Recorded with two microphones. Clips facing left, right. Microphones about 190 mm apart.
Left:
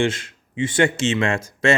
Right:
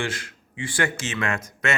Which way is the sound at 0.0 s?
25° left (ahead or behind).